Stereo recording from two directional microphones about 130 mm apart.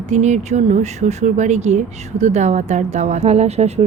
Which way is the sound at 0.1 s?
60° right (ahead or behind).